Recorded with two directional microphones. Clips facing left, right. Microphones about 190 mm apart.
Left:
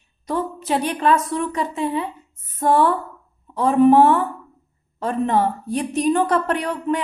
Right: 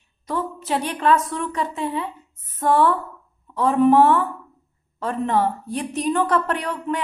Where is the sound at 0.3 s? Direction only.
15° left (ahead or behind).